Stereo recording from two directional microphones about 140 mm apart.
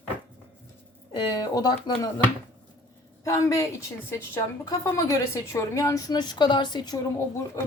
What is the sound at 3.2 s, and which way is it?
A woman's voice, 25° left (ahead or behind).